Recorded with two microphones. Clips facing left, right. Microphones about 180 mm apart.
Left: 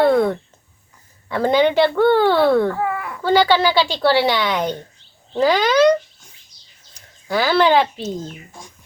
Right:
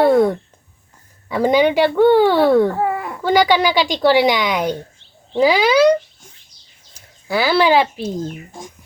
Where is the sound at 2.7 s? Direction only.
30° right (ahead or behind).